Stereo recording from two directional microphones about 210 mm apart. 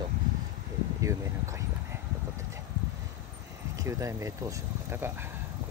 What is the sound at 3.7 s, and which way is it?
Speech, 15° right (ahead or behind).